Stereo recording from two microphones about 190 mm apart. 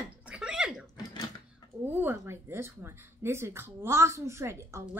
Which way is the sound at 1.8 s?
10° right (ahead or behind).